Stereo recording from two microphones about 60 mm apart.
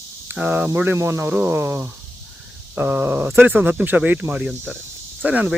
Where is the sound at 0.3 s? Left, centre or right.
Right.